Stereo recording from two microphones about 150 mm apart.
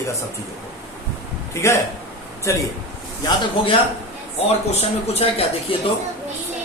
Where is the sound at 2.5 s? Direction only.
20° left (ahead or behind).